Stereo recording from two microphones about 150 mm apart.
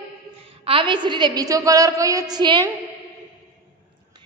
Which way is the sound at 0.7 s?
35° right (ahead or behind).